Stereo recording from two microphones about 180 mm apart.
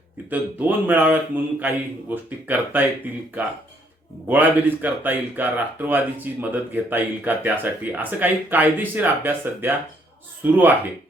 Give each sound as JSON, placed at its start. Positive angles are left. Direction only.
{"t": 0.3, "sound": "speech", "side_deg": -10}
{"t": 4.3, "sound": "speech", "side_deg": -10}